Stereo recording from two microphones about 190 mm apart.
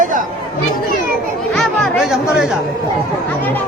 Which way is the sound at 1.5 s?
Centre (ahead or behind).